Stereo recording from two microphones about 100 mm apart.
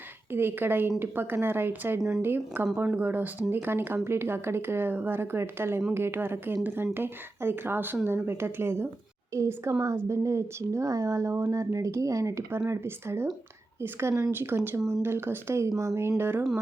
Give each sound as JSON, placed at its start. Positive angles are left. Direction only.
{"t": 0.3, "sound": "speech", "side_deg": -20}